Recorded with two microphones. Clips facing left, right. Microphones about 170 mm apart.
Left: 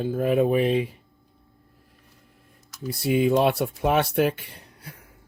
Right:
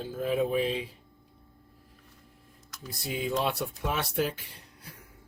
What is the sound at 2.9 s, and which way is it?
Speech, 65° left (ahead or behind).